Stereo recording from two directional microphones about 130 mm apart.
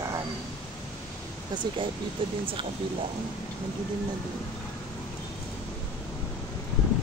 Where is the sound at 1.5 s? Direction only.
35° right (ahead or behind).